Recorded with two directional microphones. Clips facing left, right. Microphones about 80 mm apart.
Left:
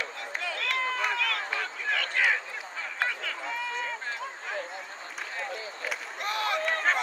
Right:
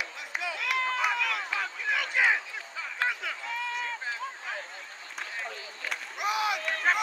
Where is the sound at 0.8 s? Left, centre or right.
Centre.